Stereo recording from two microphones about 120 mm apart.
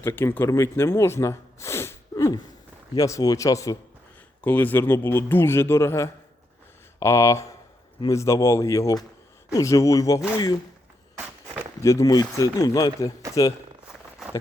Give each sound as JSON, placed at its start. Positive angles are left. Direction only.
{"t": 0.0, "sound": "a man's voice", "side_deg": 20}
{"t": 4.4, "sound": "a man's voice", "side_deg": 15}
{"t": 11.8, "sound": "a man's voice", "side_deg": 25}